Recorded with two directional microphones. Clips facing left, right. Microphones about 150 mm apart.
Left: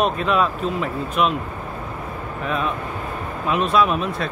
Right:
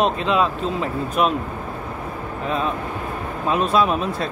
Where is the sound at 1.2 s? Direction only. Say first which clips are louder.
Right 1 dB; 35° right (ahead or behind).